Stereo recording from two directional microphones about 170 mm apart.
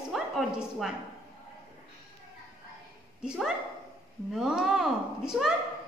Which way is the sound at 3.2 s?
5° right (ahead or behind).